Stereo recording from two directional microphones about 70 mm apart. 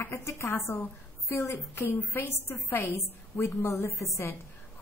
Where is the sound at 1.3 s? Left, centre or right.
Left.